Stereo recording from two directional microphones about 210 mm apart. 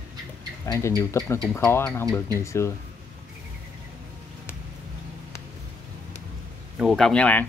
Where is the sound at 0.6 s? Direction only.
15° left (ahead or behind).